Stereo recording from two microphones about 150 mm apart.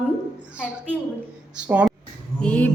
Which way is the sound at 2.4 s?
10° left (ahead or behind).